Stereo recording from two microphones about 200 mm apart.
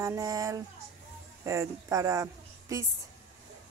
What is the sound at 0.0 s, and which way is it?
Speech, 15° right (ahead or behind).